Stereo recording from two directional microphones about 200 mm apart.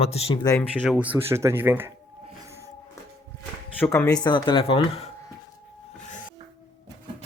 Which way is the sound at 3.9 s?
20° left (ahead or behind).